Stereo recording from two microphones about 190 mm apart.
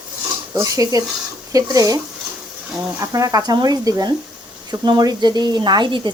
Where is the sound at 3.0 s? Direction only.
20° right (ahead or behind).